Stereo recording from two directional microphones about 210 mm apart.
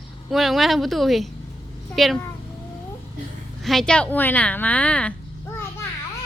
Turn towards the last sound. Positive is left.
turn(degrees=10)  # may be behind; listen again after turning